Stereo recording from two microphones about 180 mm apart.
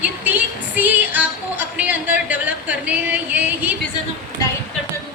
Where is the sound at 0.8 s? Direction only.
10° right (ahead or behind).